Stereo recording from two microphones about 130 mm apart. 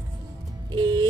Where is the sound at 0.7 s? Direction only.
30° right (ahead or behind).